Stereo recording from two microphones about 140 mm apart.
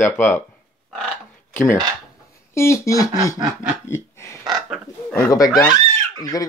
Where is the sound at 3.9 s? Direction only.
20° left (ahead or behind).